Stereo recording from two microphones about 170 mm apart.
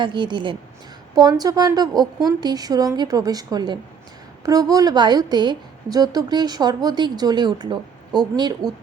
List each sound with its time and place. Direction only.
0.0 s a woman's voice: 30° right (ahead or behind)